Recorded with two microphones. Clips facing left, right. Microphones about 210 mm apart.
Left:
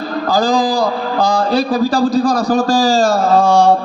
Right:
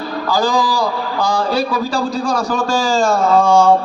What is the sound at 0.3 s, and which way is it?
A man's voice, 35° left (ahead or behind).